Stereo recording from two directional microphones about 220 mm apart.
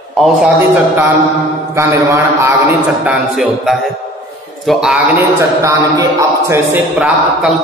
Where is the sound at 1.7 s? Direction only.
15° right (ahead or behind).